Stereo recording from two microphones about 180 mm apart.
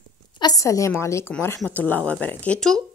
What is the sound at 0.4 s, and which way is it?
A woman's voice, 20° left (ahead or behind).